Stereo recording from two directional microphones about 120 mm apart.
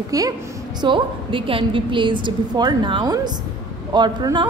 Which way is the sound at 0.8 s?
45° right (ahead or behind).